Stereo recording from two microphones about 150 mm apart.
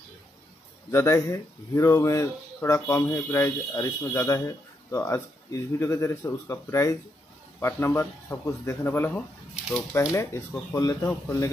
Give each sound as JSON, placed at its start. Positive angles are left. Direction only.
{"t": 0.9, "sound": "a man's voice", "side_deg": 20}